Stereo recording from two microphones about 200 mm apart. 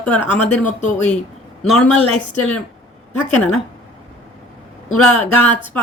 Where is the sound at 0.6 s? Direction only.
40° left (ahead or behind).